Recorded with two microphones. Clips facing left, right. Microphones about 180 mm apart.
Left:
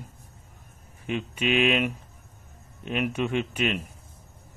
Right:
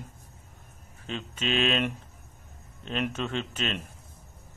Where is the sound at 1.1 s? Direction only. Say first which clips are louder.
Left 5 dB; 10° left (ahead or behind).